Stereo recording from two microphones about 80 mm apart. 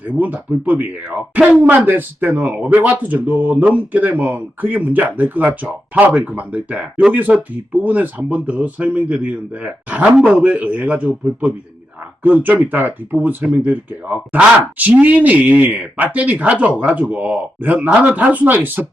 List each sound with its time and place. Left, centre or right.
0.2 s speech: centre